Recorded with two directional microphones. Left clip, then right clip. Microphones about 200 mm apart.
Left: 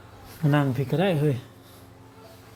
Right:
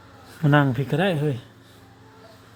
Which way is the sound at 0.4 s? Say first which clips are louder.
Right 5 dB; 20° right (ahead or behind).